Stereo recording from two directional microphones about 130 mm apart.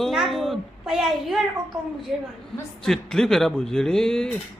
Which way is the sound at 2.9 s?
5° left (ahead or behind).